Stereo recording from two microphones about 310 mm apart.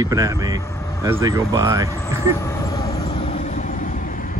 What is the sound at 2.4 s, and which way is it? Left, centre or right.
Vehicle, centre.